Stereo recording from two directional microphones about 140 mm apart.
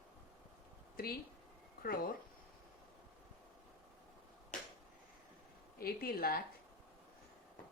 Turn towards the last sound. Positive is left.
turn(degrees=90)